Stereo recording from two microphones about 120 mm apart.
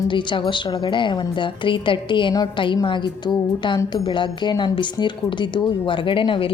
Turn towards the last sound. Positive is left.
turn(degrees=45)  # may be behind; listen again after turning